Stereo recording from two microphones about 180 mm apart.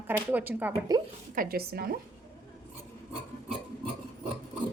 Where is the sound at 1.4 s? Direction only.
55° right (ahead or behind).